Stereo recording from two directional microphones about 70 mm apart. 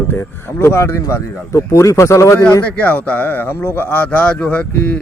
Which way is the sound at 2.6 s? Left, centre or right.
Left.